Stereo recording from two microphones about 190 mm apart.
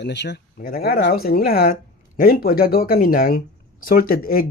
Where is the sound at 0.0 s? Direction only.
65° left (ahead or behind).